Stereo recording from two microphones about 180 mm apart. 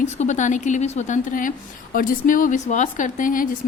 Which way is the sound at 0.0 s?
40° left (ahead or behind).